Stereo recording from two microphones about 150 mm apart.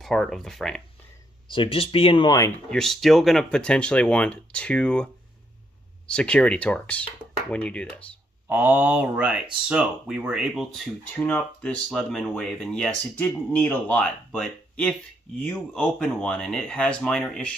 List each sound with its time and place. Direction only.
0.0 s speech: centre (ahead or behind)
1.5 s speech: 35° left (ahead or behind)
2.7 s speech: 5° left (ahead or behind)
8.5 s speech: 15° right (ahead or behind); by 17.5 s 5° left (ahead or behind)